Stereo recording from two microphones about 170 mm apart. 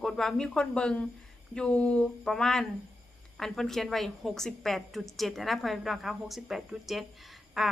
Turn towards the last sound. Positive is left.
turn(degrees=0)  # may be behind; listen again after turning